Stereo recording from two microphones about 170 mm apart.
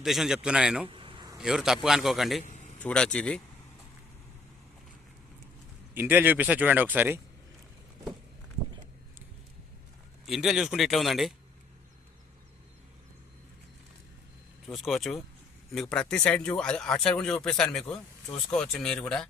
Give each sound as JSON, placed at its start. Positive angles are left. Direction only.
{"t": 0.0, "sound": "speech", "side_deg": 0}
{"t": 0.9, "sound": "a sound", "side_deg": -30}
{"t": 1.4, "sound": "speech", "side_deg": 0}
{"t": 2.4, "sound": "a sound", "side_deg": 45}
{"t": 2.7, "sound": "speech", "side_deg": 5}
{"t": 5.9, "sound": "speech", "side_deg": -10}
{"t": 10.2, "sound": "speech", "side_deg": 0}
{"t": 14.7, "sound": "speech", "side_deg": 0}